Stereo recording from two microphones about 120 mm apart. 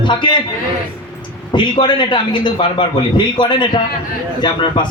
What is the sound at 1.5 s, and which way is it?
A man's voice, 40° left (ahead or behind).